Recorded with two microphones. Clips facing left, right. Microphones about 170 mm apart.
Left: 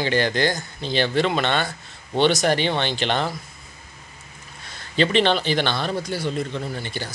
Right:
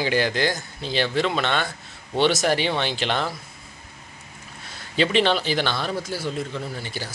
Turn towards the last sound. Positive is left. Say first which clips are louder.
# left 2 dB
turn(degrees=-5)  # may be behind; listen again after turning